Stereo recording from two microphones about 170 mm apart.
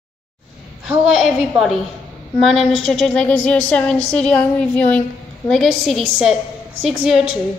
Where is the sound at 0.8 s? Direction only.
5° right (ahead or behind).